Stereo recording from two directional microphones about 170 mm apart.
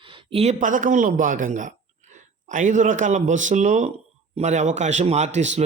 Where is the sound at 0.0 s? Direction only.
30° right (ahead or behind).